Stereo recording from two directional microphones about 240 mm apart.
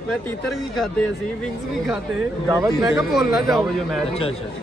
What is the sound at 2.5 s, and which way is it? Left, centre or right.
Speech, centre.